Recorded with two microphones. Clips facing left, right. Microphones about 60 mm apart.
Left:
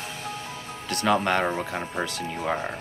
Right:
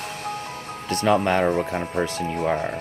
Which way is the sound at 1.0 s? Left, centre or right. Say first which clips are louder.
Right 3 dB; centre.